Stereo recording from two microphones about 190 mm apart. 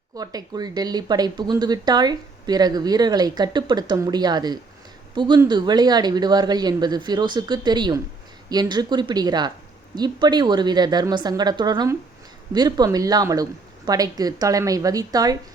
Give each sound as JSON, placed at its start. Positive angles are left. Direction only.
{"t": 0.2, "sound": "speech", "side_deg": -20}